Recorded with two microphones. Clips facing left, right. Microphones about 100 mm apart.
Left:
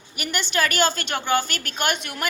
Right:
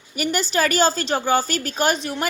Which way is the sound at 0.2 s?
35° right (ahead or behind).